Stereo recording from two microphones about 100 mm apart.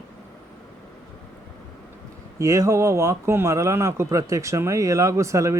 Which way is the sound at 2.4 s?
30° right (ahead or behind).